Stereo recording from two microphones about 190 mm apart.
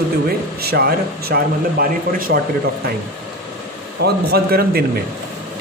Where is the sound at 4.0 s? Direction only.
55° right (ahead or behind).